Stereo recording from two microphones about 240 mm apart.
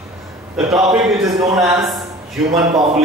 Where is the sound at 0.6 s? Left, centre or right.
Centre.